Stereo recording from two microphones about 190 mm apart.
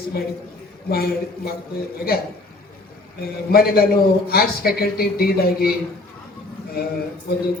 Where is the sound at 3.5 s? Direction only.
55° left (ahead or behind).